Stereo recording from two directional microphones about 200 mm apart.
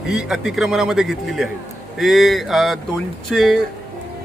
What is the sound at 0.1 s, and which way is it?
A man's voice, 5° right (ahead or behind).